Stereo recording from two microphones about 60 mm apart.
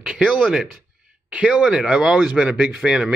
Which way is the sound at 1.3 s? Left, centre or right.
Right.